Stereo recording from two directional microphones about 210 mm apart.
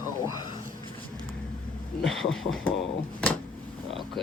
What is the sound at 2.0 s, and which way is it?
Speech, centre (ahead or behind).